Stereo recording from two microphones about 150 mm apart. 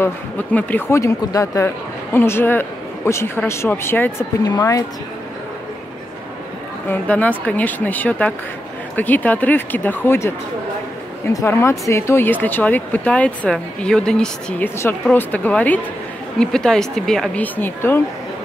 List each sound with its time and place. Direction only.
0.0 s speech: 10° left (ahead or behind)
6.9 s a woman's voice: 10° left (ahead or behind)